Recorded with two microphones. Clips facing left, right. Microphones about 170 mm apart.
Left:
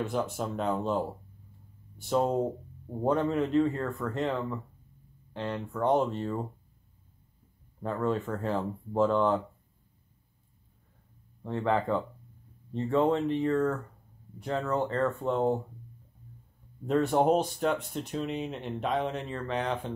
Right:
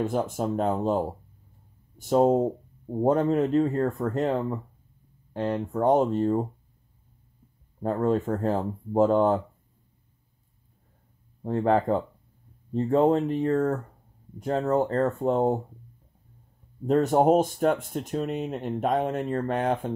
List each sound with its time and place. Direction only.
0.0 s speech: 45° right (ahead or behind)
7.8 s speech: 45° right (ahead or behind)
11.4 s speech: 45° right (ahead or behind)
16.8 s speech: 45° right (ahead or behind)